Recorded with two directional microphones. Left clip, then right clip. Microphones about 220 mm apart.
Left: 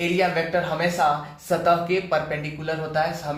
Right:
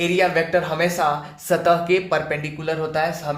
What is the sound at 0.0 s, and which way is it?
Speech, 45° right (ahead or behind).